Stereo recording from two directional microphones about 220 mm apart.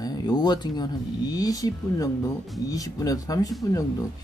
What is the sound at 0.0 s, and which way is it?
Speech, 20° left (ahead or behind).